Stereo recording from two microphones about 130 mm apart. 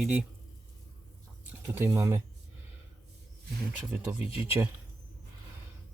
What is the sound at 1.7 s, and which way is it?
Speech, 20° right (ahead or behind).